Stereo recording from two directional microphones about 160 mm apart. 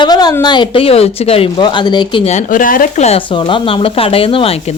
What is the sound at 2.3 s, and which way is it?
Speech, 50° left (ahead or behind).